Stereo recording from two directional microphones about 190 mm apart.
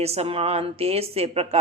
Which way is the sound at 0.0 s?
35° right (ahead or behind).